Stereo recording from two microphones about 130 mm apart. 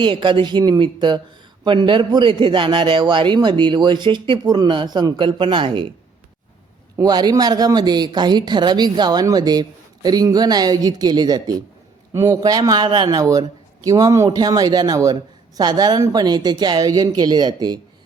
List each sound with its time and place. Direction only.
0.0 s a man's voice: 40° right (ahead or behind)
6.9 s a man's voice: 30° right (ahead or behind)